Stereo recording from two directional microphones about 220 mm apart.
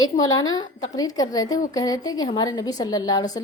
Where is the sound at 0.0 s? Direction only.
15° left (ahead or behind).